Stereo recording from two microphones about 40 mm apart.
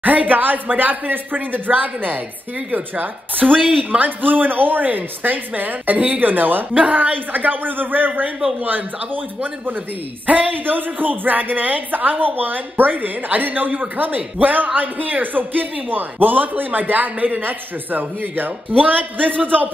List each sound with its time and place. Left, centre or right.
0.0 s a woman's voice: right
6.7 s a woman's voice: right